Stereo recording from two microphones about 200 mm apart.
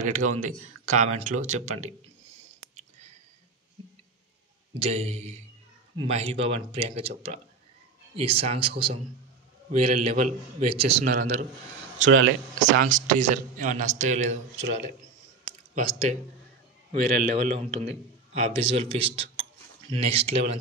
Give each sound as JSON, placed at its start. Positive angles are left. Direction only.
{"t": 0.0, "sound": "a man's voice", "side_deg": -40}
{"t": 4.8, "sound": "a man's voice", "side_deg": -35}
{"t": 12.0, "sound": "speech", "side_deg": -80}
{"t": 12.5, "sound": "a man's voice", "side_deg": -40}
{"t": 15.7, "sound": "a man's voice", "side_deg": -40}